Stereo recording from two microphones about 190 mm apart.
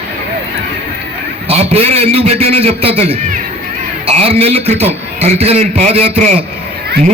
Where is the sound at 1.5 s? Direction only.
30° right (ahead or behind).